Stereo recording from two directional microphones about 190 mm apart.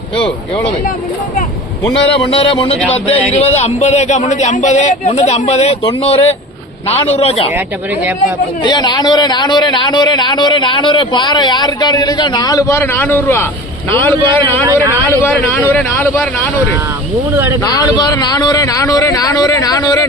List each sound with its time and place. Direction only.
1.8 s a man's voice: 30° left (ahead or behind)
8.6 s a man's voice: 25° left (ahead or behind)
17.3 s speech: 10° right (ahead or behind)
17.7 s a man's voice: 20° left (ahead or behind)